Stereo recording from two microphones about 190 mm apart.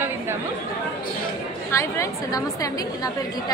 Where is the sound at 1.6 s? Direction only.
15° left (ahead or behind).